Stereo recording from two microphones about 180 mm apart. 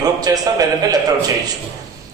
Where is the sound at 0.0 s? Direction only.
20° right (ahead or behind).